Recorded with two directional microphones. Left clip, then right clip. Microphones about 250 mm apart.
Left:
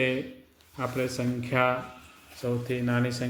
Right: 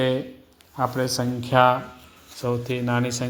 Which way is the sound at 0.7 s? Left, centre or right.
Centre.